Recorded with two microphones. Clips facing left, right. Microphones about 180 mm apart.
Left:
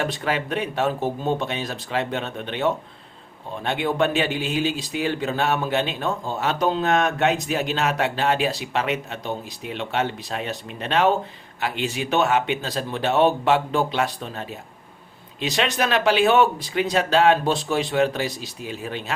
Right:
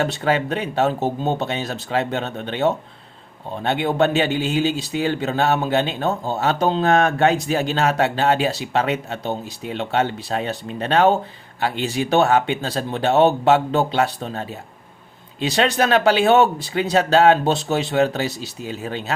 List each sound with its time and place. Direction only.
0.0 s speech: 25° right (ahead or behind)
6.0 s speech: 40° right (ahead or behind)
6.4 s speech: 30° right (ahead or behind)
15.4 s speech: 30° right (ahead or behind)